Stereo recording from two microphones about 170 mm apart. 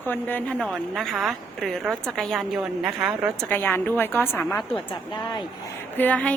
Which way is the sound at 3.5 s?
10° left (ahead or behind).